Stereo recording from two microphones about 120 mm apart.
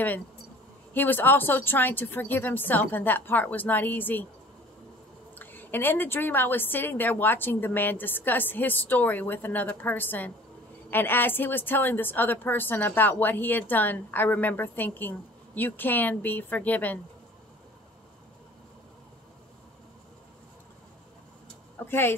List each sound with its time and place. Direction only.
0.9 s a woman's voice: 15° left (ahead or behind)
5.3 s a woman's voice: 15° left (ahead or behind)
21.7 s a sound: 20° left (ahead or behind)